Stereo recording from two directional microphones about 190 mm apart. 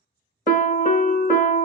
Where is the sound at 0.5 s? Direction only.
45° left (ahead or behind).